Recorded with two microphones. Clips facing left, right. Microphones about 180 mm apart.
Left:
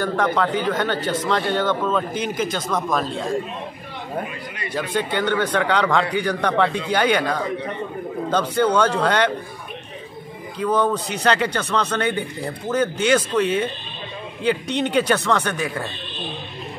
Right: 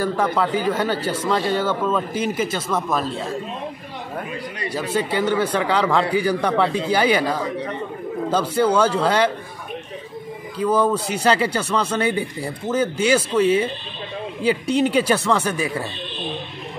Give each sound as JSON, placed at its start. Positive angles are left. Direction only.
{"t": 0.0, "sound": "a man's voice", "side_deg": -5}
{"t": 4.9, "sound": "a man's voice", "side_deg": -5}
{"t": 10.6, "sound": "a man's voice", "side_deg": -5}